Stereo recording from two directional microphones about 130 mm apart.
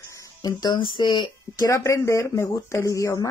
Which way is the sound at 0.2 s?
30° left (ahead or behind).